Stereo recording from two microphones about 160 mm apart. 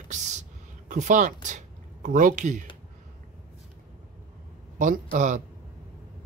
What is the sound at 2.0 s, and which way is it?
Speech, 55° right (ahead or behind).